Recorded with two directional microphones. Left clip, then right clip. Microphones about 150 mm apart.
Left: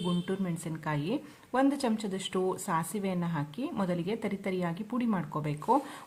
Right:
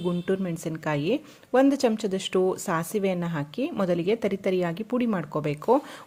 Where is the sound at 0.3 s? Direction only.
40° right (ahead or behind).